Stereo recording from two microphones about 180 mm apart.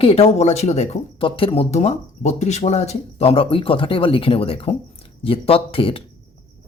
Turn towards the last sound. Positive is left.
turn(degrees=30)  # may be behind; listen again after turning